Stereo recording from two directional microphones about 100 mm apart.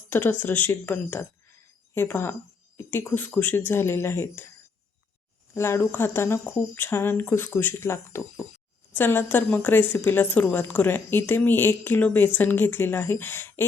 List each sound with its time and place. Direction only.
0.1 s speech: 20° left (ahead or behind)
5.5 s speech: 25° left (ahead or behind)